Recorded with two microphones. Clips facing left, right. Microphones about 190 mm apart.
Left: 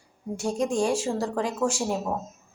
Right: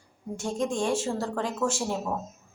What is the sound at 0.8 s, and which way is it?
Speech, 10° left (ahead or behind).